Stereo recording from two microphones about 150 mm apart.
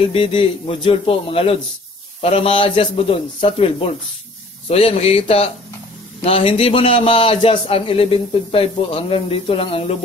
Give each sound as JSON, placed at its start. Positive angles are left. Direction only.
{"t": 0.0, "sound": "a man's voice", "side_deg": 40}